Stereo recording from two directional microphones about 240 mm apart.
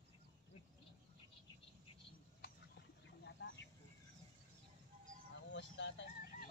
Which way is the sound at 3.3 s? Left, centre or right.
Left.